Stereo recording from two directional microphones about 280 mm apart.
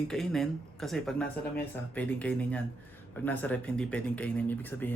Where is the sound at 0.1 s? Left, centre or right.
Centre.